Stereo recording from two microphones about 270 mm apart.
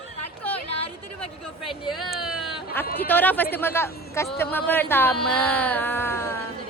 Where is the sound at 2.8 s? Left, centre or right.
Left.